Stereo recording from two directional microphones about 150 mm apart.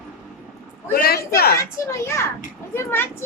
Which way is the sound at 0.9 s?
90° left.